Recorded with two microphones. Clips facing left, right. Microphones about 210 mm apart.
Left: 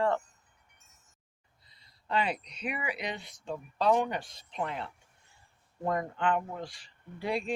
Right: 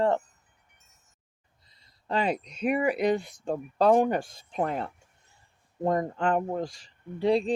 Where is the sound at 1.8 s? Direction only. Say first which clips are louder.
Right 3 dB; 40° right (ahead or behind).